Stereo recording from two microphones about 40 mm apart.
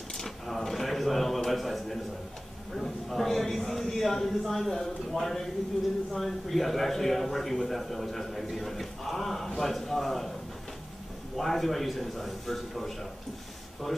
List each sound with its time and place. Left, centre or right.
0.1 s a sound: centre
5.1 s a man's voice: centre
11.3 s a man's voice: centre